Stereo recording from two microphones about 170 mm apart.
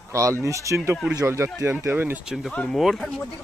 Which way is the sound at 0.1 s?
20° right (ahead or behind).